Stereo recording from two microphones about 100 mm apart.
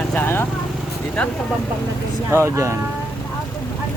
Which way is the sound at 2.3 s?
30° right (ahead or behind).